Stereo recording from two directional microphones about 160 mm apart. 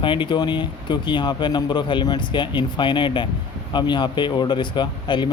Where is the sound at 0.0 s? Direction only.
30° left (ahead or behind).